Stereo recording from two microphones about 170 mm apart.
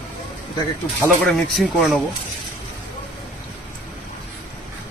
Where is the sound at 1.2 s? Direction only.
Centre (ahead or behind).